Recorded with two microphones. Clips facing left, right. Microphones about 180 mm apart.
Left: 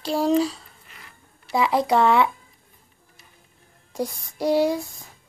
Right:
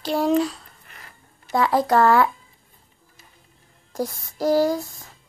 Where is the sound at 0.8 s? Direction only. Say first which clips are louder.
Right 1 dB; 50° right (ahead or behind).